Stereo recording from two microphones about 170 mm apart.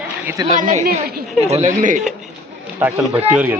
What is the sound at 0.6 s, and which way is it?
Speech, 50° right (ahead or behind).